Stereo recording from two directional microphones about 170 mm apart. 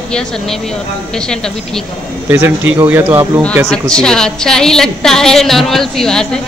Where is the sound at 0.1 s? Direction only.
5° left (ahead or behind).